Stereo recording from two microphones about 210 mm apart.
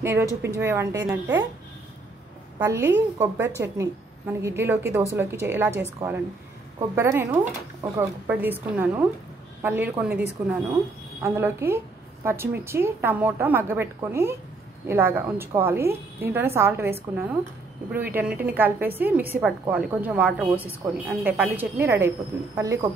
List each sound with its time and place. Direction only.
0.0 s a woman's voice: 10° right (ahead or behind)
2.6 s a woman's voice: 10° right (ahead or behind)
17.9 s a woman's voice: 10° right (ahead or behind)